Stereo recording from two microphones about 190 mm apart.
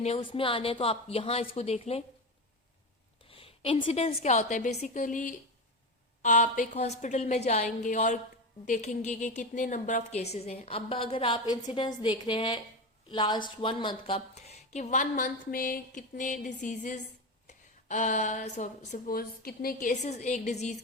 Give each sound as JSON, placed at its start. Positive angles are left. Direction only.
{"t": 0.0, "sound": "a woman's voice", "side_deg": 30}
{"t": 3.2, "sound": "a woman's voice", "side_deg": 30}